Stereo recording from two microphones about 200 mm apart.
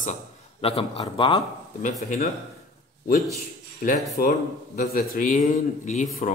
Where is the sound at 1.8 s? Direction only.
40° left (ahead or behind).